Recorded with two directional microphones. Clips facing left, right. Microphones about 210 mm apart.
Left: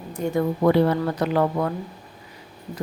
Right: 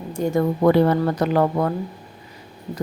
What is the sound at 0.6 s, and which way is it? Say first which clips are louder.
Speech: right 2 dB; 45° right (ahead or behind).